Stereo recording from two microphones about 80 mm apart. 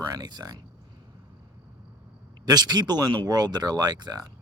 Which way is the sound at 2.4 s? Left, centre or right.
Right.